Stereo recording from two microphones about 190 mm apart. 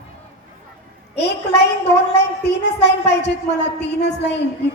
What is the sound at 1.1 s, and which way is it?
A woman's voice, 60° left (ahead or behind).